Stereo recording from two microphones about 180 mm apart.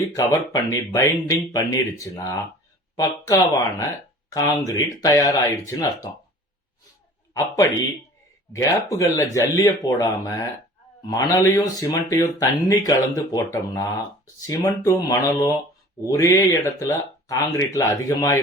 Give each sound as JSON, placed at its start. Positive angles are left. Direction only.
{"t": 0.2, "sound": "speech", "side_deg": 15}
{"t": 7.3, "sound": "speech", "side_deg": 15}